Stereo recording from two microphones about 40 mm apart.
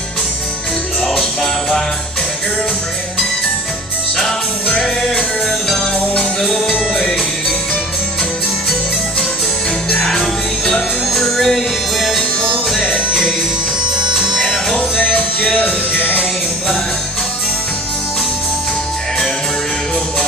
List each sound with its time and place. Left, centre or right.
1.1 s music: centre
4.8 s music: centre
6.4 s music: centre
10.1 s music: centre
12.8 s music: centre
15.1 s music: left
15.6 s music: left